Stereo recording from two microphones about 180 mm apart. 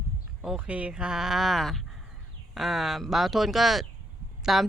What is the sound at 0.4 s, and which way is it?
Speech, 5° right (ahead or behind).